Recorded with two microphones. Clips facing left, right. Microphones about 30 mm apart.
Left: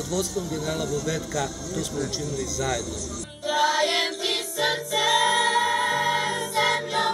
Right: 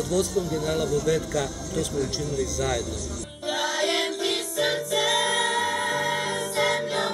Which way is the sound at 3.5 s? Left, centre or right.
Centre.